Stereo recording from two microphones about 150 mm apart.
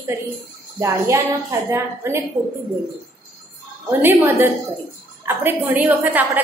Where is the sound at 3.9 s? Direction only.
15° right (ahead or behind).